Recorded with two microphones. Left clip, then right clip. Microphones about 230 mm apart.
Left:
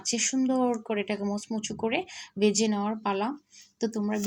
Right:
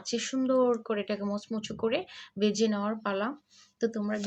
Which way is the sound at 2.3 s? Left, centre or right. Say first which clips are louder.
Left 2 dB; right.